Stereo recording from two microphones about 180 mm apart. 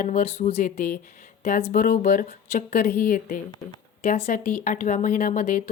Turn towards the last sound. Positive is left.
turn(degrees=45)  # may be behind; listen again after turning